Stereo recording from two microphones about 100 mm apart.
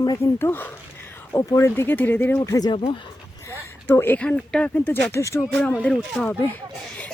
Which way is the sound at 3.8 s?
20° left (ahead or behind).